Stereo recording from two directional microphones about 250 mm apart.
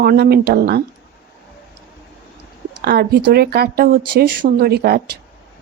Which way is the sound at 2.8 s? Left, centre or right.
Right.